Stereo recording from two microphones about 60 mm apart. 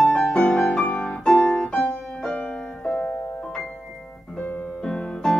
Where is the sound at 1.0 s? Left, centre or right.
Centre.